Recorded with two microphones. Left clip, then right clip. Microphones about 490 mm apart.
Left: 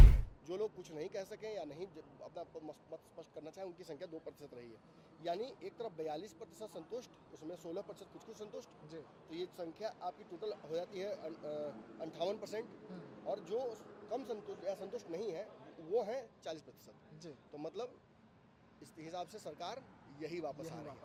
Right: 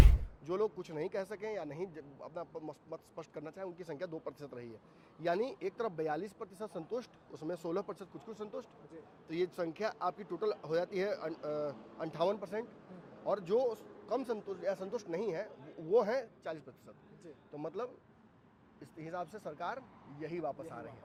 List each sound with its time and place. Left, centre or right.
0.4 s speech: right
5.2 s speech: right
13.2 s speech: right